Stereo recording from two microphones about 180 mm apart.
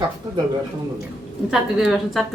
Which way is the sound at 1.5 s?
Centre (ahead or behind).